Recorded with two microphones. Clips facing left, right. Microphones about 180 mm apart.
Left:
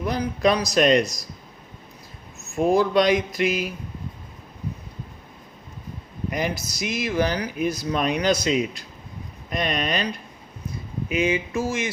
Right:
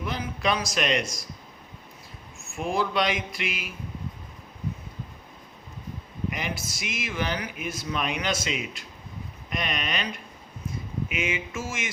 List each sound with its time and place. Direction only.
0.0 s speech: 40° left (ahead or behind)
2.5 s speech: 40° left (ahead or behind)
6.3 s speech: 40° left (ahead or behind)